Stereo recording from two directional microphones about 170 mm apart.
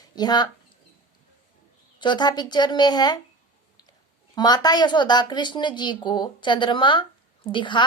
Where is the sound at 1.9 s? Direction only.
25° left (ahead or behind).